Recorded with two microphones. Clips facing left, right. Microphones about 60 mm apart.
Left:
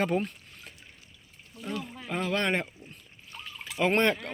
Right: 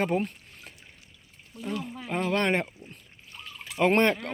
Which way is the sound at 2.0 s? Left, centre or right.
Right.